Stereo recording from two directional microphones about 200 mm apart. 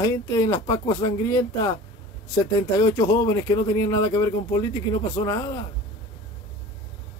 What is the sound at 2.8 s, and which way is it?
Speech, 15° left (ahead or behind).